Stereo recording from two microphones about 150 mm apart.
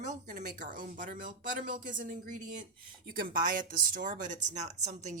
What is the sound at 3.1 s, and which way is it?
Speech, 70° right (ahead or behind).